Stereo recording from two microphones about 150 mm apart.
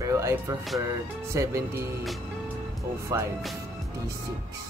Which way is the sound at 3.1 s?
20° right (ahead or behind).